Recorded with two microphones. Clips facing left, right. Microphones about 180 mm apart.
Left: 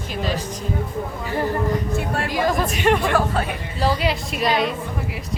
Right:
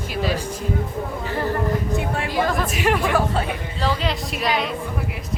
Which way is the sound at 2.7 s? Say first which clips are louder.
Left 1 dB; centre (ahead or behind).